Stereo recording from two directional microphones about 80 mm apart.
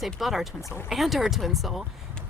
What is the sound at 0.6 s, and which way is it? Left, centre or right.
Speech, left.